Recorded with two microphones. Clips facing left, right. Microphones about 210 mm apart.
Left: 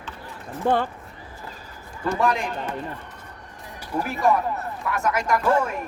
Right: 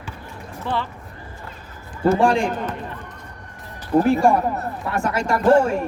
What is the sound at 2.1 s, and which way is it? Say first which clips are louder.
Speech: right 3 dB; 30° right (ahead or behind).